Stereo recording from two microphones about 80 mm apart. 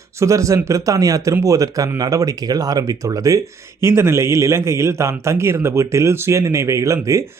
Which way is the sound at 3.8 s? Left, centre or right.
Right.